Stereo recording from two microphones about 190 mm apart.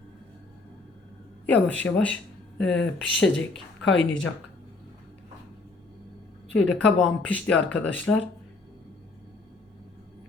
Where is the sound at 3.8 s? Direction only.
80° left.